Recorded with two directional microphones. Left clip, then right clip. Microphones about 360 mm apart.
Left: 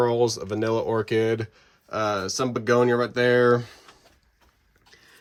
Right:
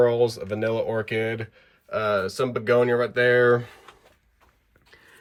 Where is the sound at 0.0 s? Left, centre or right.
Centre.